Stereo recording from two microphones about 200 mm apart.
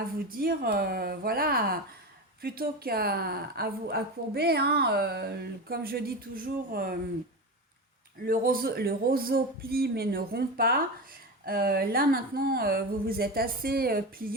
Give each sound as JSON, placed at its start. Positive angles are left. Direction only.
{"t": 0.3, "sound": "a woman's voice", "side_deg": -45}
{"t": 8.2, "sound": "a woman's voice", "side_deg": -45}